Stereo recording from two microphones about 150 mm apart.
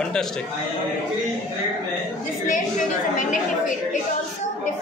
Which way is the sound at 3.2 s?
55° left (ahead or behind).